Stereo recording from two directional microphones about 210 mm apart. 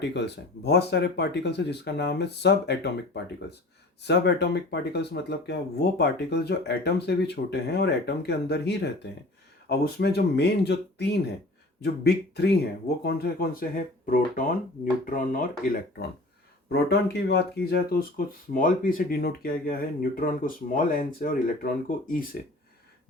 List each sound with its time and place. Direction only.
0.1 s speech: 55° left (ahead or behind)
4.0 s speech: 55° left (ahead or behind)
18.2 s speech: 40° left (ahead or behind)